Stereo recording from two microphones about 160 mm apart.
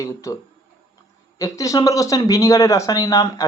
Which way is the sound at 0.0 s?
20° left (ahead or behind).